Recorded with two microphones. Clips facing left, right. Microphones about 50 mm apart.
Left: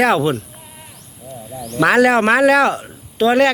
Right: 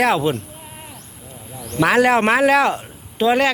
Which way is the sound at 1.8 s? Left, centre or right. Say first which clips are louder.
Left 2 dB; centre.